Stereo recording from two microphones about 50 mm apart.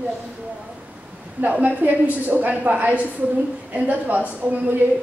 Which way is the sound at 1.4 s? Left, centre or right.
Right.